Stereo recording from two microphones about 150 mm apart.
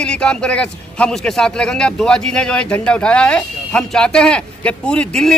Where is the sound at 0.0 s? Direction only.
5° left (ahead or behind).